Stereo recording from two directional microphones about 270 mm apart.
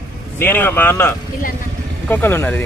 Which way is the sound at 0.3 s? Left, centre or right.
Centre.